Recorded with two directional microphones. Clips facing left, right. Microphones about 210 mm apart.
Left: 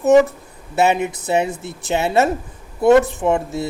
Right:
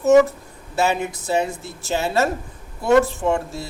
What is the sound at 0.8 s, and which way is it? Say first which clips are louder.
Speech: left 4 dB; 20° left (ahead or behind).